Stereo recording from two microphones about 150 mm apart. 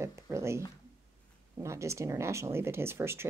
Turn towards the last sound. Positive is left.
turn(degrees=-15)  # may be behind; listen again after turning